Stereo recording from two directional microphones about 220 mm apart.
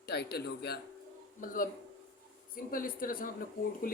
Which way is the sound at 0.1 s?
45° left (ahead or behind).